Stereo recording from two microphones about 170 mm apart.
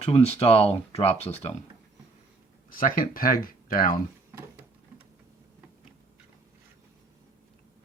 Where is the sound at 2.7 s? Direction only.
55° left (ahead or behind).